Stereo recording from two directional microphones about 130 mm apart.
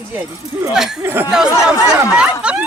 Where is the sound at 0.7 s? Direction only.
5° right (ahead or behind).